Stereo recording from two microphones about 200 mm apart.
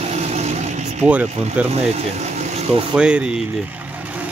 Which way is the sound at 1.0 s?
5° right (ahead or behind).